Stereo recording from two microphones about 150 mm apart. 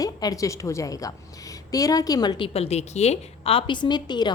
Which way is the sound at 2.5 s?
45° left (ahead or behind).